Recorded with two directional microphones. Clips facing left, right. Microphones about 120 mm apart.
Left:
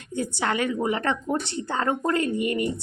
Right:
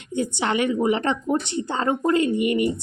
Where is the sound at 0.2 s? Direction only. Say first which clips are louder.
Right 3 dB; 20° right (ahead or behind).